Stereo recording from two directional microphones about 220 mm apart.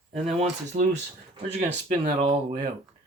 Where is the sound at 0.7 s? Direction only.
25° right (ahead or behind).